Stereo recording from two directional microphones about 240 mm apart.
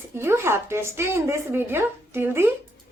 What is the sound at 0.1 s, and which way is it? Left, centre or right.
A woman's voice, centre.